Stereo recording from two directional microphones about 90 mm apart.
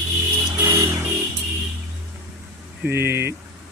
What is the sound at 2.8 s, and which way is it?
Speech, 25° right (ahead or behind).